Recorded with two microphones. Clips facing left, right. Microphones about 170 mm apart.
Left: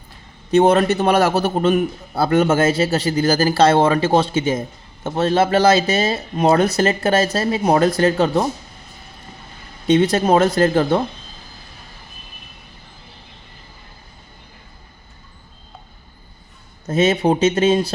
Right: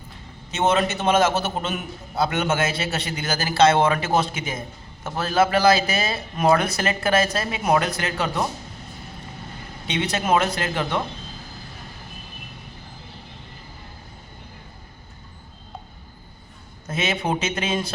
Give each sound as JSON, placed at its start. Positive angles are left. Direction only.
{"t": 0.9, "sound": "a man's voice", "side_deg": 40}
{"t": 9.8, "sound": "speech", "side_deg": 45}
{"t": 16.8, "sound": "a man's voice", "side_deg": 35}